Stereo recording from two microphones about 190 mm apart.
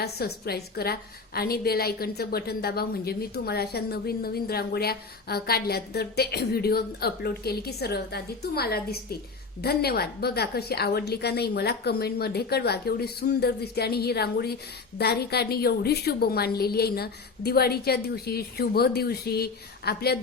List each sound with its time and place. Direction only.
0.0 s a woman's voice: 55° left (ahead or behind)